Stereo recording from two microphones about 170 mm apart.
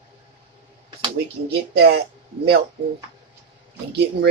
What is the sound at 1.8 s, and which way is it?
Speech, 75° right (ahead or behind).